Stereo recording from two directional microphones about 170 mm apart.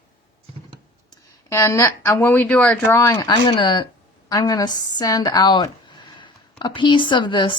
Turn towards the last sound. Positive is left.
turn(degrees=30)  # may be behind; listen again after turning